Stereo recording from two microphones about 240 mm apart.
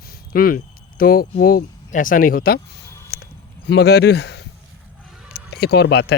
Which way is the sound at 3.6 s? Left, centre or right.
Left.